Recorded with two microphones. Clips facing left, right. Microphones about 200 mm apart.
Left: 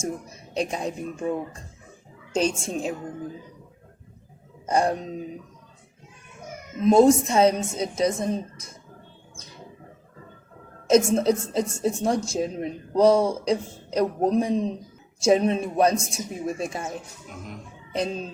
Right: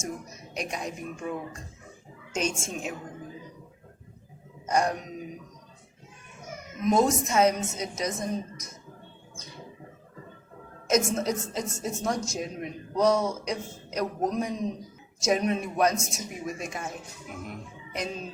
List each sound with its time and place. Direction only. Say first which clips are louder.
0.0 s a woman's voice: left 5 dB; 30° left (ahead or behind)
4.6 s a woman's voice: left 3 dB; 30° left (ahead or behind)
6.8 s a woman's voice: left 7 dB; 30° left (ahead or behind)
10.8 s a woman's voice: left 7 dB; 30° left (ahead or behind)
17.9 s a woman's voice: left 6 dB; 30° left (ahead or behind)